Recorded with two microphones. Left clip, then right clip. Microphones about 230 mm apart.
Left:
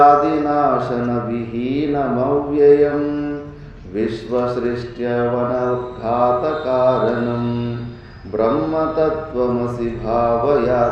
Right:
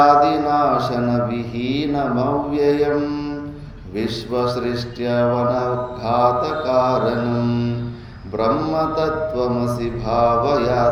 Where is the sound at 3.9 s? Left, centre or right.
Right.